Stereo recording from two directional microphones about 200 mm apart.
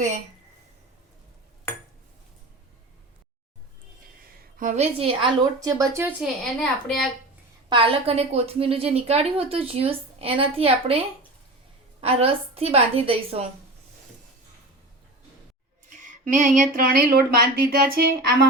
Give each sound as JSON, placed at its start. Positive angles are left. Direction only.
{"t": 4.5, "sound": "a woman's voice", "side_deg": -40}
{"t": 5.5, "sound": "speech", "side_deg": -15}
{"t": 7.7, "sound": "a woman's voice", "side_deg": -25}
{"t": 16.0, "sound": "speech", "side_deg": -40}